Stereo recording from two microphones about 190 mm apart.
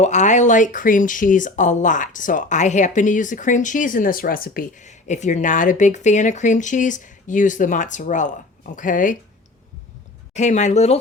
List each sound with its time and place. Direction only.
0.0 s speech: 40° left (ahead or behind)
10.3 s speech: 40° left (ahead or behind)